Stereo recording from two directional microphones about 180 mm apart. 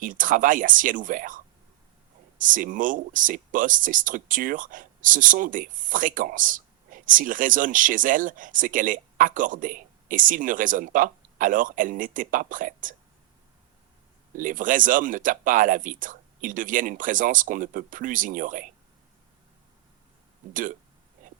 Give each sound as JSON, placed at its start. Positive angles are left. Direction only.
{"t": 0.0, "sound": "speech", "side_deg": -50}
{"t": 2.4, "sound": "speech", "side_deg": -50}
{"t": 14.3, "sound": "speech", "side_deg": -50}
{"t": 20.5, "sound": "speech", "side_deg": -50}